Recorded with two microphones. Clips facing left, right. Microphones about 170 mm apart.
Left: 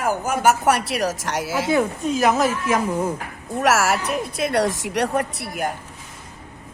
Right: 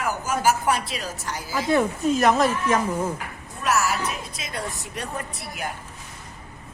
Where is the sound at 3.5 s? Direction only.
90° left; by 5.6 s 65° left (ahead or behind).